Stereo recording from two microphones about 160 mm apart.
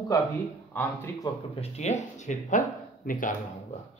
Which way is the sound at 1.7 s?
45° left (ahead or behind).